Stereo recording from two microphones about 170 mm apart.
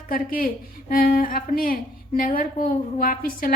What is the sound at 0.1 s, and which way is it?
A woman's voice, 55° left (ahead or behind).